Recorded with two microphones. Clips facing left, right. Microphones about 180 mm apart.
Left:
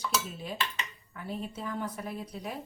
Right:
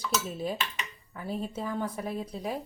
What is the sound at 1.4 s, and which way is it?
A woman's voice, 25° right (ahead or behind).